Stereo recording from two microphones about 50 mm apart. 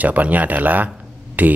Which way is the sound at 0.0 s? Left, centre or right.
Right.